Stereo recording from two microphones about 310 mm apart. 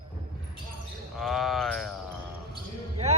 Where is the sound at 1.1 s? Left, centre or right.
Centre.